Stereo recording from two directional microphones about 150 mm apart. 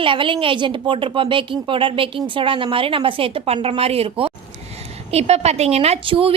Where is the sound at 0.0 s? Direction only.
35° right (ahead or behind).